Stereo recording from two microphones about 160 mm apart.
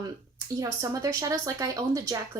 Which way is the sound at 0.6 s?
20° right (ahead or behind).